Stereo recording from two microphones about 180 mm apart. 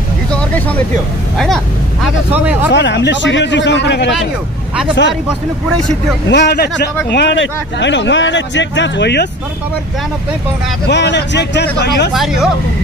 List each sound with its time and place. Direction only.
0.3 s vehicle: 5° left (ahead or behind)
2.3 s speech: 10° right (ahead or behind)
2.7 s speech: 75° left (ahead or behind)
5.7 s speech: 5° left (ahead or behind)
6.3 s speech: 65° left (ahead or behind)
7.1 s a man's voice: 75° left (ahead or behind)
10.9 s speech: 75° left (ahead or behind)
12.1 s speech: centre (ahead or behind)